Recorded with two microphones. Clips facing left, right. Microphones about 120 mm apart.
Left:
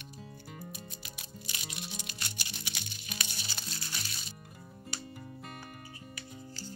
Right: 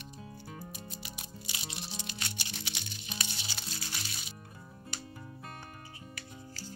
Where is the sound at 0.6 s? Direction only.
30° right (ahead or behind).